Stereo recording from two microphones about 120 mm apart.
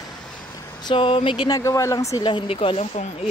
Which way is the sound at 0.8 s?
45° left (ahead or behind).